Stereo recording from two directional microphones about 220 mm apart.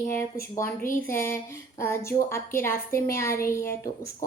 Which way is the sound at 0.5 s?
10° left (ahead or behind).